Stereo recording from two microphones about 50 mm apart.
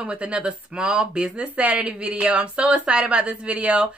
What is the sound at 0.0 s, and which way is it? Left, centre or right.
A woman's voice, right.